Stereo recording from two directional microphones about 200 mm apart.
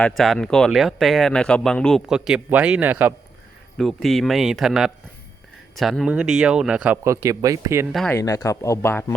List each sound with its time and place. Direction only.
0.0 s speech: centre (ahead or behind); by 7.9 s 15° right (ahead or behind)
7.9 s speech: 5° left (ahead or behind)
8.2 s speech: 15° left (ahead or behind)